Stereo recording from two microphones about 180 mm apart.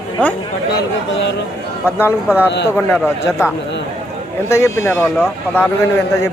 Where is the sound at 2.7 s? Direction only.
5° right (ahead or behind).